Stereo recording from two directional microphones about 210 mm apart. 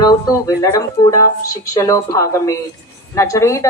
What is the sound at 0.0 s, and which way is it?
A woman's voice, 20° left (ahead or behind).